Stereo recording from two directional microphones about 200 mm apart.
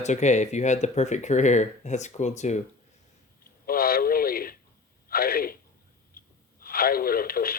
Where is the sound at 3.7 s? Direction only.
50° left (ahead or behind).